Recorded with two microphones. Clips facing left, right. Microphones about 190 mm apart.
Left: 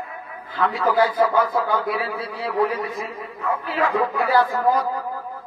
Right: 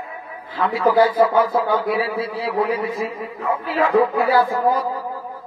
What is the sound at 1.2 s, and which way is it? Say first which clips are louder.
A man's voice: right 3 dB; 30° right (ahead or behind).